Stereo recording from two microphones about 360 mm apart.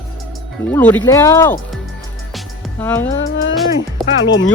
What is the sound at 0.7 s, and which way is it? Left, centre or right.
Speech, centre.